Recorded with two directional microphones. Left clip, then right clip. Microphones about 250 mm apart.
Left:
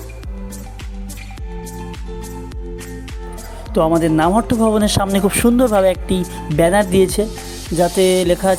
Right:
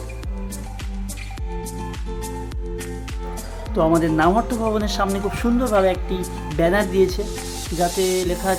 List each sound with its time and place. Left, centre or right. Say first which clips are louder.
3.8 s a man's voice: left 3 dB; left